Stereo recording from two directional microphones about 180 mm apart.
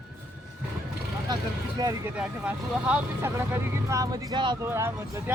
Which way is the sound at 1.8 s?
20° right (ahead or behind).